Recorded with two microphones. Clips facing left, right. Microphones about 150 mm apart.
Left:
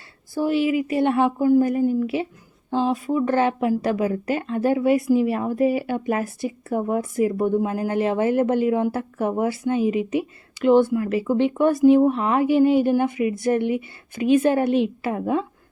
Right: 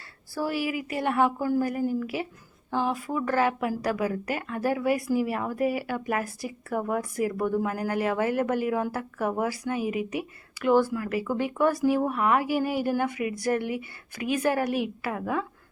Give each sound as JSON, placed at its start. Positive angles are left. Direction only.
{"t": 0.3, "sound": "speech", "side_deg": 20}